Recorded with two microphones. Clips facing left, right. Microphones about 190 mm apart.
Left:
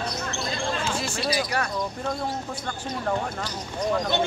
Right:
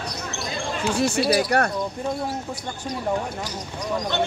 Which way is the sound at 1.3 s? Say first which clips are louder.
Right 6 dB; 60° right (ahead or behind).